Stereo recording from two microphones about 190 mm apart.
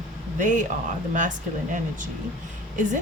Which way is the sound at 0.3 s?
40° right (ahead or behind).